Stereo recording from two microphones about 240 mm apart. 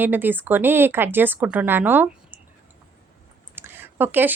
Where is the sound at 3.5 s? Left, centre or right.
Centre.